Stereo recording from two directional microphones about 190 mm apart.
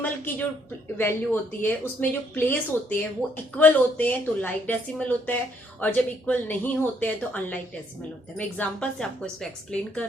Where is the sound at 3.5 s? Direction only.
10° left (ahead or behind).